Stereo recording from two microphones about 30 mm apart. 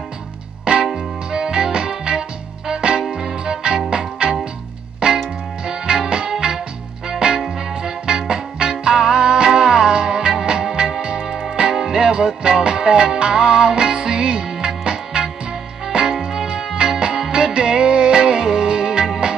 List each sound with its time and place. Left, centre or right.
0.9 s music: right
11.7 s music: centre